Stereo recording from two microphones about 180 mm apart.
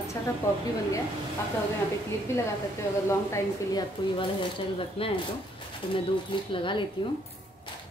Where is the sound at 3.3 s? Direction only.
25° left (ahead or behind).